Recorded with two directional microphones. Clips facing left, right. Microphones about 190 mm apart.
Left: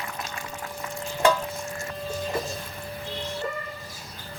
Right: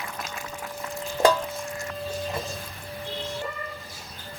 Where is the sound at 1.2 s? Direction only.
15° right (ahead or behind).